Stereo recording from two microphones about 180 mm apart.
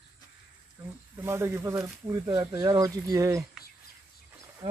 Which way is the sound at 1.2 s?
15° right (ahead or behind).